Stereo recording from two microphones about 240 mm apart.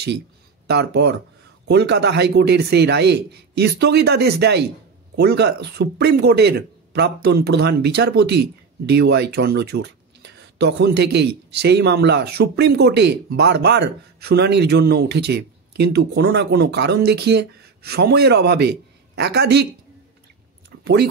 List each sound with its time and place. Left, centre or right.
0.7 s a man's voice: right
20.8 s speech: right